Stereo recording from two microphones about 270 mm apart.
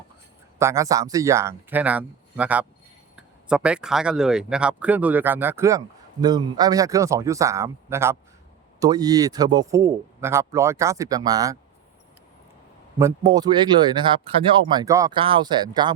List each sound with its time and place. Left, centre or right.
0.6 s speech: centre
13.0 s speech: centre